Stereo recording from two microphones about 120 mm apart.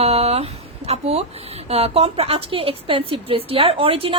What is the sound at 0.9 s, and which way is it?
A woman's voice, 60° right (ahead or behind).